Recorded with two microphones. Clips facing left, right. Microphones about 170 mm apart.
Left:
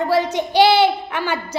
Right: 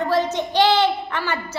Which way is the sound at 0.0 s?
10° left (ahead or behind).